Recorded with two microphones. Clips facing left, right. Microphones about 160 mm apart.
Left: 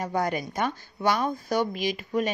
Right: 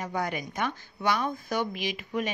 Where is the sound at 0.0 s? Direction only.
40° left (ahead or behind).